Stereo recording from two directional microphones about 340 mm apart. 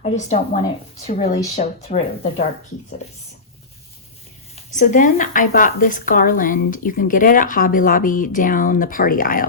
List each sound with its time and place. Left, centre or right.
0.0 s speech: left
4.5 s speech: left